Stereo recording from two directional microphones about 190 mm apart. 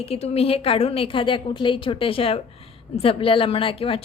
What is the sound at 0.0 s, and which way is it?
A woman's voice, 30° left (ahead or behind).